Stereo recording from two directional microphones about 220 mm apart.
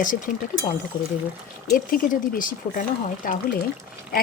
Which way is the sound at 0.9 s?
20° left (ahead or behind).